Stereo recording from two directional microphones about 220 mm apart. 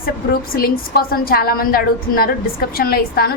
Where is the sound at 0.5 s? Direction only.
40° left (ahead or behind).